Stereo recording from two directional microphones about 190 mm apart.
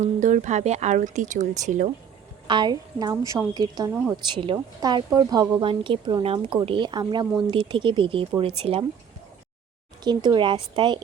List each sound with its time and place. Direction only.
0.0 s speech: 40° right (ahead or behind)
2.5 s a woman's voice: 25° right (ahead or behind)
4.2 s a woman's voice: 25° right (ahead or behind)
10.0 s a woman's voice: 20° right (ahead or behind)